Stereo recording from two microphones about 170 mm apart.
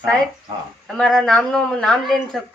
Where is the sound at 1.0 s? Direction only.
5° left (ahead or behind).